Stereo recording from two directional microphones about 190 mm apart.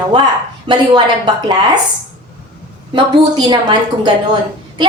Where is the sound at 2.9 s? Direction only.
25° right (ahead or behind).